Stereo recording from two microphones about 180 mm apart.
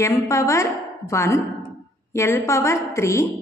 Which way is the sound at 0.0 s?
15° left (ahead or behind).